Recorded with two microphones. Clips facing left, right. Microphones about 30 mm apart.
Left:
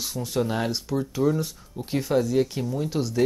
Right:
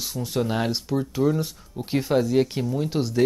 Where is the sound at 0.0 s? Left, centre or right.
Centre.